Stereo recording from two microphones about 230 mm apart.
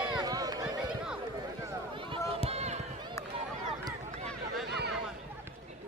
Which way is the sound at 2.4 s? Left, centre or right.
Right.